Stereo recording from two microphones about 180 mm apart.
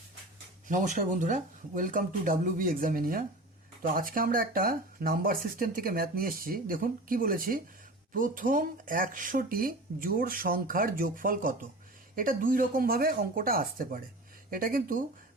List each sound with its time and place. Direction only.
0.7 s speech: 45° right (ahead or behind)